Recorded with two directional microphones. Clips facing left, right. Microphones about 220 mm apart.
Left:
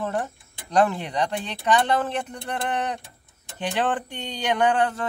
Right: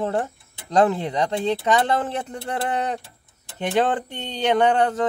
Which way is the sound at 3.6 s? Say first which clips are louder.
Right 4 dB; 20° right (ahead or behind).